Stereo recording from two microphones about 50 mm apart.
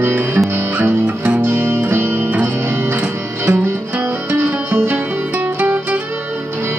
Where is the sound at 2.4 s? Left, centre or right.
Right.